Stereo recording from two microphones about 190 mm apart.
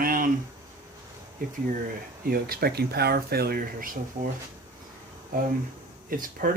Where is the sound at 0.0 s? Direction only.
50° right (ahead or behind).